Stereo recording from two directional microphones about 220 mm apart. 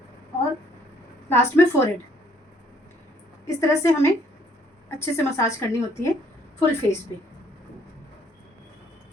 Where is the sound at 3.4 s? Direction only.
15° left (ahead or behind).